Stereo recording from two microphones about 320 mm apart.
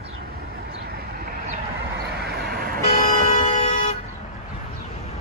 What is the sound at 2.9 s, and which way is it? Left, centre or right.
Vehicle, left.